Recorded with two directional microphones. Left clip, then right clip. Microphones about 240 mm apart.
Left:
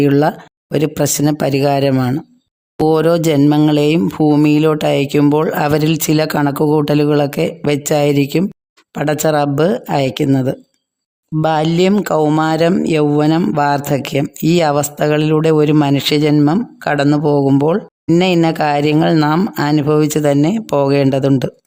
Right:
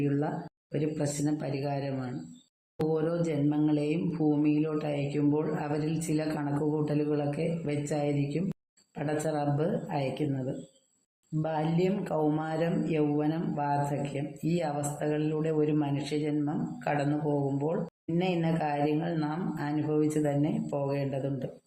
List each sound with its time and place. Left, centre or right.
0.0 s speech: left
11.4 s speech: left